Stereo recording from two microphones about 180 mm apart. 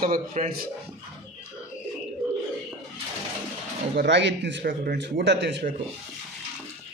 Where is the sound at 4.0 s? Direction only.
75° right (ahead or behind).